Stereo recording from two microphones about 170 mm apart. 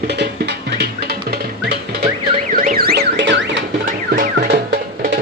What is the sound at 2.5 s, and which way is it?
Car alarm, 55° right (ahead or behind).